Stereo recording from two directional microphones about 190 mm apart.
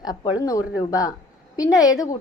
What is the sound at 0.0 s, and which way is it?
A woman's voice, 20° left (ahead or behind).